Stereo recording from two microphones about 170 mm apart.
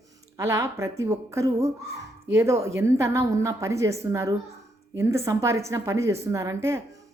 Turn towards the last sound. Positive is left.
turn(degrees=-15)  # may be behind; listen again after turning